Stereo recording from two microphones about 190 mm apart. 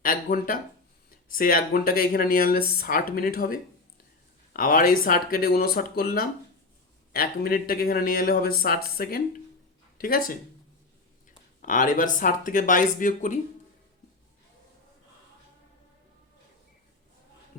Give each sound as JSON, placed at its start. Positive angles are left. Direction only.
{"t": 0.0, "sound": "speech", "side_deg": 45}